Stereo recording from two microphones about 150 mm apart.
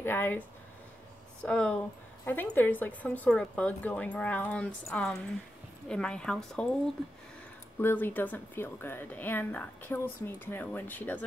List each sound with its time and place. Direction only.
0.0 s speech: 15° left (ahead or behind)
1.4 s a woman's voice: 5° left (ahead or behind)
7.8 s a woman's voice: 10° left (ahead or behind)